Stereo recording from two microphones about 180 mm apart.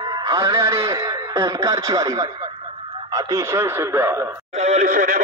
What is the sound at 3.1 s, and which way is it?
Speech, 15° right (ahead or behind).